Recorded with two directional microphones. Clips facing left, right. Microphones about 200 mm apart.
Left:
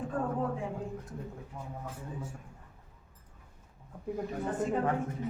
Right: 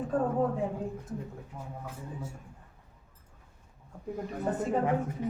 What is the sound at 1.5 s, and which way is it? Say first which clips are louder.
Speech: right 1 dB; centre (ahead or behind).